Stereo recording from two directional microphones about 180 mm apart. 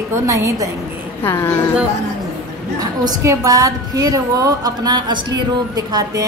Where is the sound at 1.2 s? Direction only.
15° left (ahead or behind).